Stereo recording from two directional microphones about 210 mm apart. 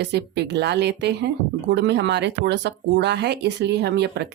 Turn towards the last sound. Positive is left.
turn(degrees=-55)  # may be behind; listen again after turning